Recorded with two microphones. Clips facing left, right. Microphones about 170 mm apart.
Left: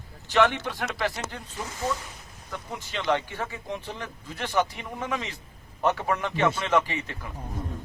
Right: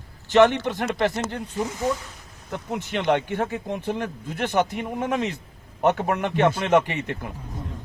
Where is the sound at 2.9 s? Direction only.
60° right (ahead or behind).